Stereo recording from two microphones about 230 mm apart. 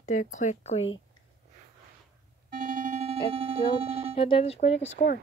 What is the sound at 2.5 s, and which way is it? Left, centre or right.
Music, right.